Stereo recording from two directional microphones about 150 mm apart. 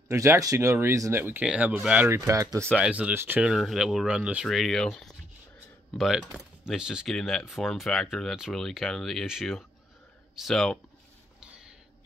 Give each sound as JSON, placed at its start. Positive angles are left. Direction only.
{"t": 0.1, "sound": "speech", "side_deg": -20}
{"t": 2.8, "sound": "speech", "side_deg": -10}
{"t": 11.3, "sound": "a sound", "side_deg": -5}